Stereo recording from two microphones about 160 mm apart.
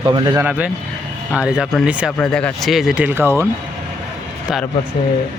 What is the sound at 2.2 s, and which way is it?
Speech, 5° left (ahead or behind).